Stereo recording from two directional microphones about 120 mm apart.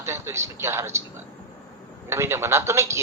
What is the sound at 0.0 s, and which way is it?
A man's voice, 20° right (ahead or behind).